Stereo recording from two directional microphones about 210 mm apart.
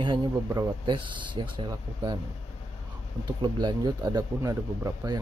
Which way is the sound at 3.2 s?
20° right (ahead or behind).